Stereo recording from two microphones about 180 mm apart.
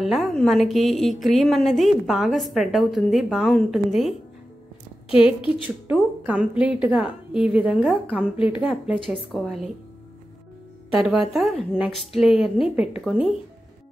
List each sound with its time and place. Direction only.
0.0 s a woman's voice: centre (ahead or behind)
5.9 s a woman's voice: 5° right (ahead or behind)
11.0 s a woman's voice: centre (ahead or behind)
12.4 s speech: 30° left (ahead or behind)
12.7 s a woman's voice: 5° right (ahead or behind)